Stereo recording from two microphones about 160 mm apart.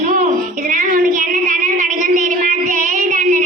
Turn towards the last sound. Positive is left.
turn(degrees=-50)  # may be behind; listen again after turning